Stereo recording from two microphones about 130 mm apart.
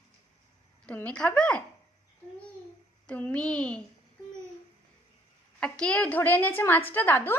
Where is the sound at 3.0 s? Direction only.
10° left (ahead or behind).